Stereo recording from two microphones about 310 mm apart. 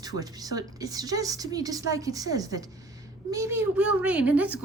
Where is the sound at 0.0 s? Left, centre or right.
Centre.